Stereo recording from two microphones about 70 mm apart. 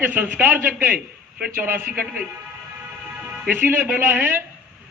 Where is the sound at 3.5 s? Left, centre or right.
Right.